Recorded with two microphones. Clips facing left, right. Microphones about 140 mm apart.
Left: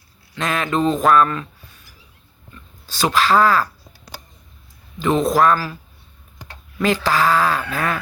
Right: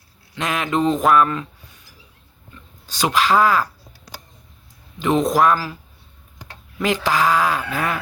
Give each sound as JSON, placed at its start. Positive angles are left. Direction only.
{"t": 0.3, "sound": "speech", "side_deg": -15}
{"t": 2.8, "sound": "speech", "side_deg": -15}
{"t": 4.9, "sound": "speech", "side_deg": -15}
{"t": 6.7, "sound": "speech", "side_deg": -15}